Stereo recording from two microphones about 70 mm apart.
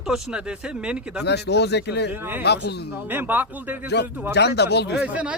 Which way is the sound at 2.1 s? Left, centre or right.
Right.